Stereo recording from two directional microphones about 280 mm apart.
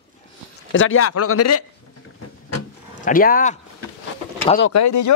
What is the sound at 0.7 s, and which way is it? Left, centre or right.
Speech, left.